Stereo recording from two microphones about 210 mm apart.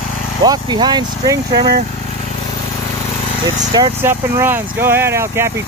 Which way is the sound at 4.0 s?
10° right (ahead or behind).